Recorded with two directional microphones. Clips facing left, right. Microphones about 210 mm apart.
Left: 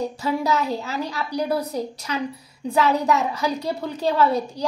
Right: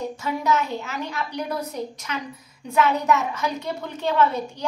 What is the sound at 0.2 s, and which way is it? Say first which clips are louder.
A woman's voice: even; 35° left (ahead or behind).